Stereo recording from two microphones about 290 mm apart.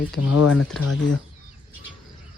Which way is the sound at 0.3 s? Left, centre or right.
Left.